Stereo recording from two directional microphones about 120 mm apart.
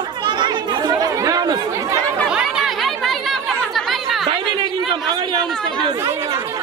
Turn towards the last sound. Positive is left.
turn(degrees=-40)  # may be behind; listen again after turning